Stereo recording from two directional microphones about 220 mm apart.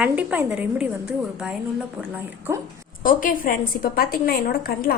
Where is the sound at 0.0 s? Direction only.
5° right (ahead or behind).